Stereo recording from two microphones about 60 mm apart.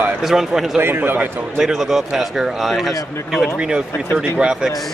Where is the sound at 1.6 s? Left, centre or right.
Centre.